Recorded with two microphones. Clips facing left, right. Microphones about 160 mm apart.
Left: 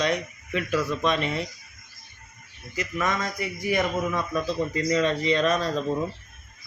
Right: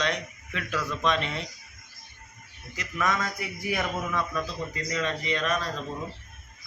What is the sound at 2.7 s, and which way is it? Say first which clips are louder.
A man's voice: left 1 dB; centre (ahead or behind).